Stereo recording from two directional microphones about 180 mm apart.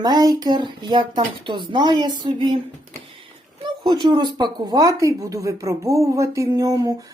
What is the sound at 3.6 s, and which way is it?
Speech, 25° right (ahead or behind).